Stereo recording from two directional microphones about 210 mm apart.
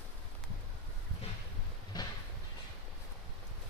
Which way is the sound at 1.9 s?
20° left (ahead or behind).